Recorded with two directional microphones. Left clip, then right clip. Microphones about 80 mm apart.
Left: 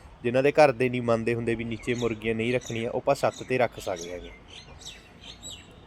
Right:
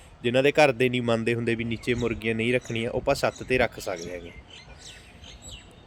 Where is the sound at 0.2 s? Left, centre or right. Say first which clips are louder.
Even; right.